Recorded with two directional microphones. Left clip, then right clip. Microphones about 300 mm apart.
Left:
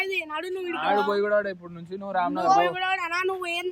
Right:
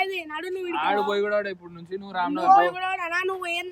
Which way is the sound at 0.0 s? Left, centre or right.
Left.